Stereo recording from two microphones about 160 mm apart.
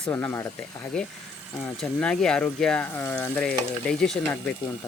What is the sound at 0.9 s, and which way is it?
Speech, 5° left (ahead or behind).